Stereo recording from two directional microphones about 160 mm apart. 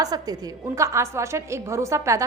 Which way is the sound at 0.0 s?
25° right (ahead or behind).